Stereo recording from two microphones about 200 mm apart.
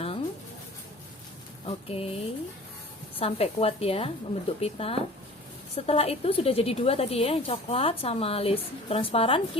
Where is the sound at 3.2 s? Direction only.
30° left (ahead or behind).